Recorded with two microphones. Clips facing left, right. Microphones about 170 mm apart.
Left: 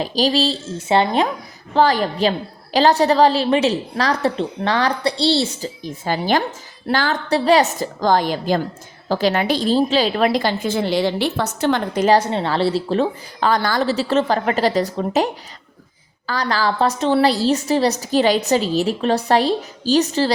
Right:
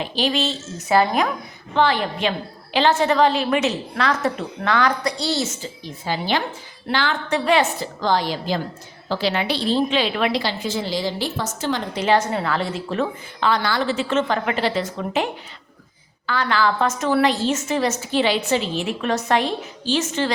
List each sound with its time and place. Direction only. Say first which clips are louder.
0.0 s a woman's voice: left 4 dB; 40° left (ahead or behind)
1.7 s a woman's voice: left 3 dB; 40° left (ahead or behind)
5.8 s a woman's voice: left 4 dB; 45° left (ahead or behind)
12.0 s a woman's voice: left 3 dB; 30° left (ahead or behind)